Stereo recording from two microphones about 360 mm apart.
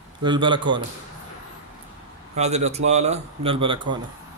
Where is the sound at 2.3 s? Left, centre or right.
Centre.